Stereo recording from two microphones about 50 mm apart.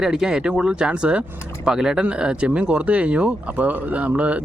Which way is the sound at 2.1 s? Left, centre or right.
Right.